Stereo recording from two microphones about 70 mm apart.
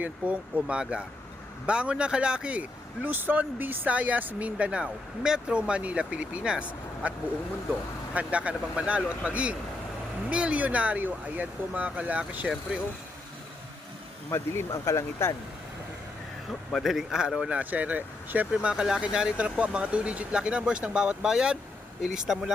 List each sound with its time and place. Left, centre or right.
0.0 s speech: right
8.1 s speech: centre
14.3 s speech: left
16.7 s speech: centre
17.5 s speech: right
18.5 s speech: centre